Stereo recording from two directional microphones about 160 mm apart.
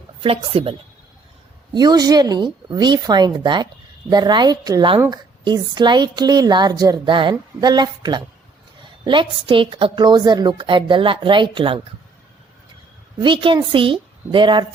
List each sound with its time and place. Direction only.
0.2 s a woman's voice: 35° right (ahead or behind); by 5.2 s 15° right (ahead or behind)
5.5 s a woman's voice: 25° right (ahead or behind)
13.2 s a woman's voice: 30° right (ahead or behind)